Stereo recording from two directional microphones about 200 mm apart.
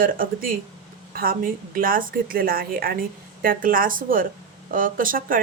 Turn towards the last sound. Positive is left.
turn(degrees=-45)  # may be behind; listen again after turning